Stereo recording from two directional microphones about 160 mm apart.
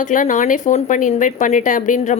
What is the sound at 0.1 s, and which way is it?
A woman's voice, 55° left (ahead or behind).